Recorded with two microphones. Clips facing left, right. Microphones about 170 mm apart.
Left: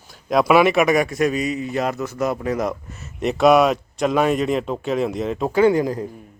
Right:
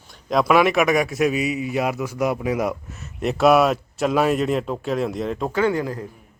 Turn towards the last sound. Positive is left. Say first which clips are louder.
# left 5 dB
turn(degrees=15)  # may be behind; listen again after turning